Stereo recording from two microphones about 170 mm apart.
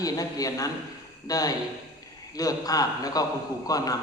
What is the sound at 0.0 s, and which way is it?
Speech, 20° left (ahead or behind).